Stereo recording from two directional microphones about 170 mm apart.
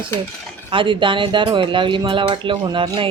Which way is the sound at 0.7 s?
30° right (ahead or behind).